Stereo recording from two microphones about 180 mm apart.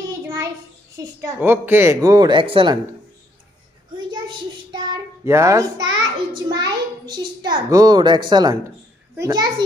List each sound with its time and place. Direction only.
0.9 s a woman's voice: 15° right (ahead or behind)
4.6 s a child's voice: 20° right (ahead or behind)